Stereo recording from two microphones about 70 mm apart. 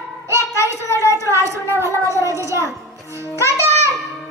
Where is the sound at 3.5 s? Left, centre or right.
Right.